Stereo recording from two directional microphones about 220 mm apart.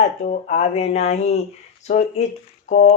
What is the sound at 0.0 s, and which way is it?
Speech, 30° left (ahead or behind).